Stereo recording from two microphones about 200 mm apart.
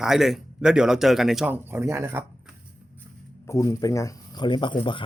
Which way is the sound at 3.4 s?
15° left (ahead or behind).